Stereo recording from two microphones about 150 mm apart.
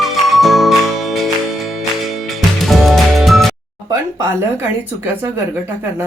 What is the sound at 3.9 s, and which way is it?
Speech, 20° right (ahead or behind).